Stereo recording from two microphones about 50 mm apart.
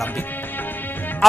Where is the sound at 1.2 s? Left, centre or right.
Centre.